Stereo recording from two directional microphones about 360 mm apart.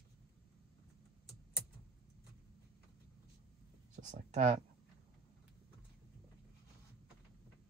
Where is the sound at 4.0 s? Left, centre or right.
Centre.